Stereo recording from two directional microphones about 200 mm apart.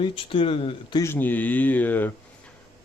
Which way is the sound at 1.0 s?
10° left (ahead or behind).